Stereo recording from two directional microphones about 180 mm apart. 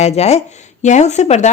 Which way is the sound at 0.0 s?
35° left (ahead or behind).